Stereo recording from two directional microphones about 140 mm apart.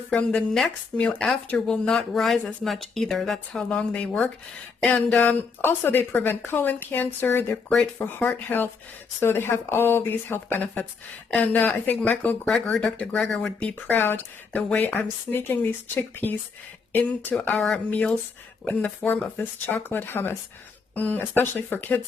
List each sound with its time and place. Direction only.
0.1 s speech: 5° left (ahead or behind)